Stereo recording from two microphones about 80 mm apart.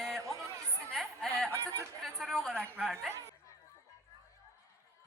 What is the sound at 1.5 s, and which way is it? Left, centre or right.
Speech, right.